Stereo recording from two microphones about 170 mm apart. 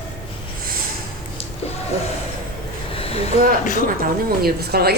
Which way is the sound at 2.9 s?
35° left (ahead or behind).